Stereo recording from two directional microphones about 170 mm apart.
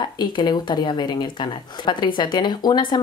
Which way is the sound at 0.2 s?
25° left (ahead or behind).